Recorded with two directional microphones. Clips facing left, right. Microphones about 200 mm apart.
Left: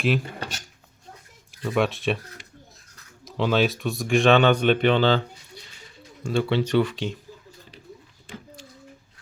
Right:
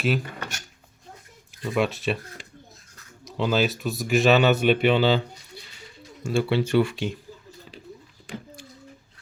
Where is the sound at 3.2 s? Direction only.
Centre (ahead or behind).